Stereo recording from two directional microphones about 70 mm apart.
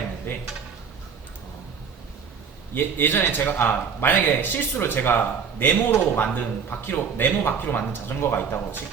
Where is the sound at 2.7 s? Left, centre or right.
Left.